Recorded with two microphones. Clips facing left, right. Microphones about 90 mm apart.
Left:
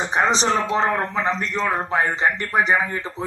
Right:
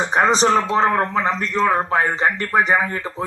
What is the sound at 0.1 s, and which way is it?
A man's voice, 45° right (ahead or behind).